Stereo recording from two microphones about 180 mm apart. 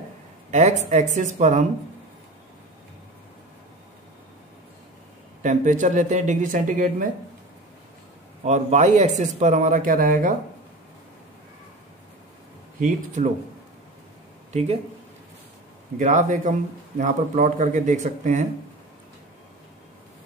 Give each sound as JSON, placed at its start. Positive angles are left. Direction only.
{"t": 0.5, "sound": "speech", "side_deg": -40}
{"t": 5.4, "sound": "speech", "side_deg": -45}
{"t": 8.5, "sound": "speech", "side_deg": -40}
{"t": 12.8, "sound": "speech", "side_deg": -40}
{"t": 14.5, "sound": "speech", "side_deg": -35}
{"t": 16.0, "sound": "speech", "side_deg": -45}